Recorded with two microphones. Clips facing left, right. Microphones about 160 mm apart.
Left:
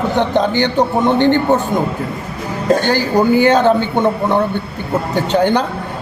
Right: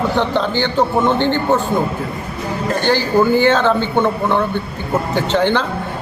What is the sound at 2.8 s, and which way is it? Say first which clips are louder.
A man's voice: left 1 dB; 10° left (ahead or behind).